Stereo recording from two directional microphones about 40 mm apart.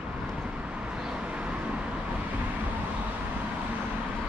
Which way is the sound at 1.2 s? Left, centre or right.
Right.